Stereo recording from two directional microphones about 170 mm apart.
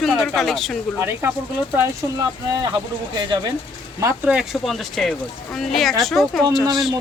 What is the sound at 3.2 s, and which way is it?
Speech, 25° right (ahead or behind).